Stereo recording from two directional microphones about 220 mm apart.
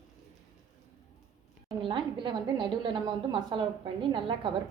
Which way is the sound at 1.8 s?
20° right (ahead or behind).